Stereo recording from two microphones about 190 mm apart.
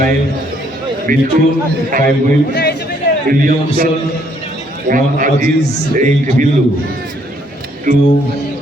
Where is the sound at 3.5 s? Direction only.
45° right (ahead or behind).